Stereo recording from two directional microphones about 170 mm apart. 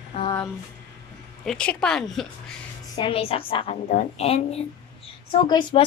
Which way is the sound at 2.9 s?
30° left (ahead or behind).